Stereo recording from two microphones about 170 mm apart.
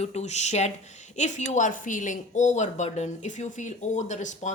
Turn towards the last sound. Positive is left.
turn(degrees=45)  # may be behind; listen again after turning